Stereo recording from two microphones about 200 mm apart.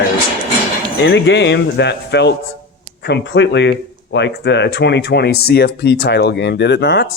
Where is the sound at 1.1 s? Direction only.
65° left (ahead or behind).